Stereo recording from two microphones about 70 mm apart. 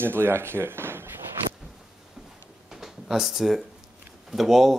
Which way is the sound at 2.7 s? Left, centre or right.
Centre.